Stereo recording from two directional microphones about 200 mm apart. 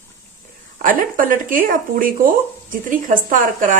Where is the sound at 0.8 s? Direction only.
45° right (ahead or behind).